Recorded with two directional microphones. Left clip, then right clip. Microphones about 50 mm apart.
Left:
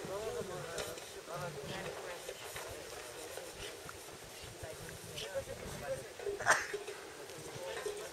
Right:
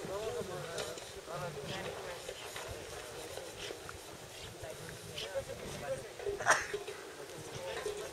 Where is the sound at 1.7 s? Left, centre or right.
Centre.